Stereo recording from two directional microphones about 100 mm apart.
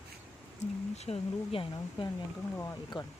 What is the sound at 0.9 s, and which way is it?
Speech, 90° left.